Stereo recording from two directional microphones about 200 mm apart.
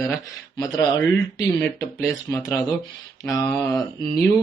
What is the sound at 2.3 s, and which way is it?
Speech, 15° left (ahead or behind).